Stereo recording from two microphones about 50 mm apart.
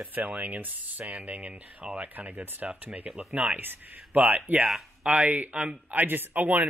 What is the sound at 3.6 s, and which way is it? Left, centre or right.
Speech, right.